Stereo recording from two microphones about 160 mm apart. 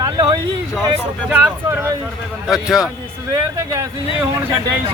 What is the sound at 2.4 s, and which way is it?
Speech, 5° right (ahead or behind).